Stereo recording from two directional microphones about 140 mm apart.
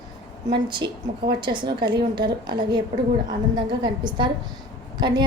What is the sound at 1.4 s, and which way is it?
A woman's voice, 35° right (ahead or behind).